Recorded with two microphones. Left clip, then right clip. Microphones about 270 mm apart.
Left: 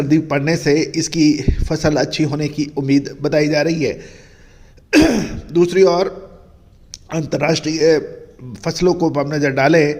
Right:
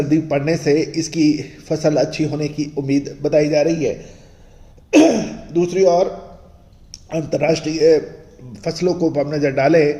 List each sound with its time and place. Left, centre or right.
0.1 s a man's voice: left
4.9 s speech: left
6.9 s a man's voice: left